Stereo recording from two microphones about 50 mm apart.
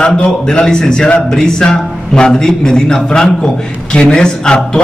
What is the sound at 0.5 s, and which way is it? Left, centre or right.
A man's voice, centre.